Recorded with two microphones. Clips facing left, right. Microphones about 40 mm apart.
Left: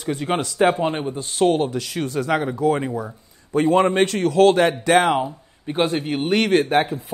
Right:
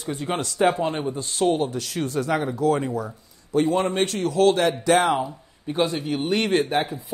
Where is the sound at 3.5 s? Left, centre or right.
Left.